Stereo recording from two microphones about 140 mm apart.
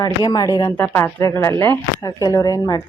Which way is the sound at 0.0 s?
30° left (ahead or behind).